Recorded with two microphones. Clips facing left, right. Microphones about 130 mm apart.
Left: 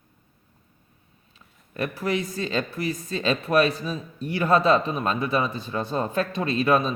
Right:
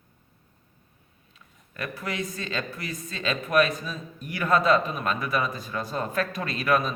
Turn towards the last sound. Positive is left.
turn(degrees=25)  # may be behind; listen again after turning